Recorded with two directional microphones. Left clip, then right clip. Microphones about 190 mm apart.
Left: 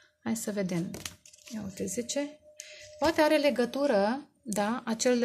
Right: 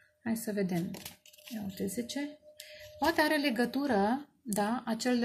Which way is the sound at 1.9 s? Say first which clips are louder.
Left 5 dB; 50° left (ahead or behind).